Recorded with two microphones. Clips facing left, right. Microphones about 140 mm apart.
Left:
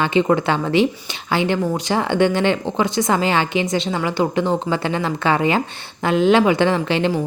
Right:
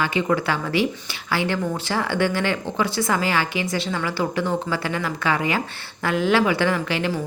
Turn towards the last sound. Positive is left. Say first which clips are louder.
# left 5 dB
turn(degrees=25)  # may be behind; listen again after turning